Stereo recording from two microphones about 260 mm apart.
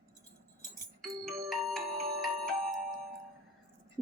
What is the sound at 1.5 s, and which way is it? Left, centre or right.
Glockenspiel, centre.